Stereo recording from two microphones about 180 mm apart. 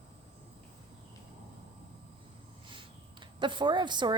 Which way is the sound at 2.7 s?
25° right (ahead or behind).